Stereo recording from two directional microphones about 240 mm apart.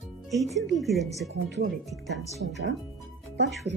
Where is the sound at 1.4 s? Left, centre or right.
Right.